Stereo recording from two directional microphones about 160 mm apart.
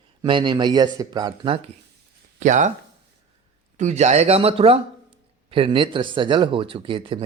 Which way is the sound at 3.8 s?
45° right (ahead or behind).